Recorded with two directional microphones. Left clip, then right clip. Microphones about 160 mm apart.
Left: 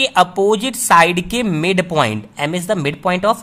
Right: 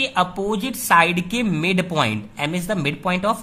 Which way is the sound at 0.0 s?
35° left (ahead or behind).